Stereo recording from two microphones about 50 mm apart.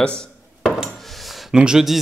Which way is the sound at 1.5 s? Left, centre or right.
Centre.